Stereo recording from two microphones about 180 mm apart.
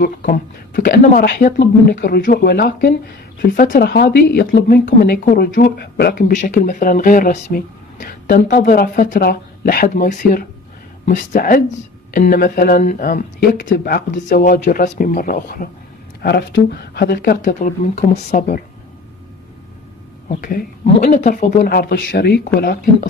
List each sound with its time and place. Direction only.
0.2 s speech: 50° left (ahead or behind)
13.4 s speech: 65° left (ahead or behind)
16.2 s speech: 65° left (ahead or behind); by 18.6 s 45° left (ahead or behind)
20.3 s speech: 55° left (ahead or behind)
21.7 s speech: 60° left (ahead or behind)